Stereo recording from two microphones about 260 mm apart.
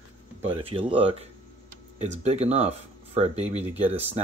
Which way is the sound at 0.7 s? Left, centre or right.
Right.